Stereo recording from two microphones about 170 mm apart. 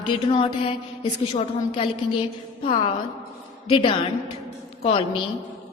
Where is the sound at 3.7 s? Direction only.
30° left (ahead or behind).